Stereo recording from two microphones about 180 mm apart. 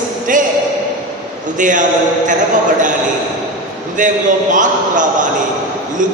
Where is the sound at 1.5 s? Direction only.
45° right (ahead or behind).